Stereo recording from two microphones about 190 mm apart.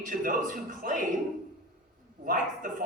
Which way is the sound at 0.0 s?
45° right (ahead or behind).